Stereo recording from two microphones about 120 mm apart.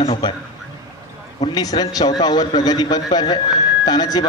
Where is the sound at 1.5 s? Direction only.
35° left (ahead or behind).